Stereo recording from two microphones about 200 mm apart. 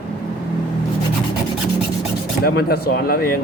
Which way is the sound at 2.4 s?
50° left (ahead or behind).